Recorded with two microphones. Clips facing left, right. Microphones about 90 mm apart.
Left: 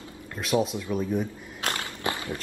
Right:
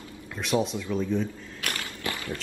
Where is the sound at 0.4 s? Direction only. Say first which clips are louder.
Left 1 dB; 5° left (ahead or behind).